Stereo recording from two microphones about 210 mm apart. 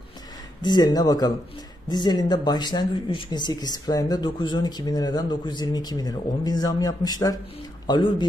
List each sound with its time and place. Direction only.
0.6 s speech: 20° left (ahead or behind)